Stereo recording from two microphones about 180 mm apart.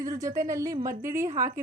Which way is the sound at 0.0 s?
20° right (ahead or behind).